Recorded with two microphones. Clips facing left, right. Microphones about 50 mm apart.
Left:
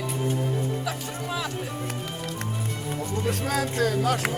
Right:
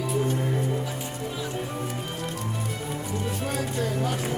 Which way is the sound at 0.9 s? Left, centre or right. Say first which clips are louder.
Left 2 dB; left.